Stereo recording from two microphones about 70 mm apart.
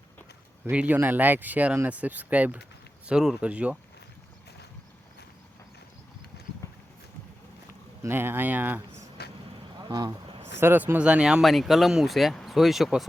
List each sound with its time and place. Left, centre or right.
0.6 s speech: right
3.1 s speech: centre
6.6 s horse: left
8.0 s speech: right
9.7 s a sound: right
10.1 s a sound: right
10.9 s speech: centre
11.4 s speech: centre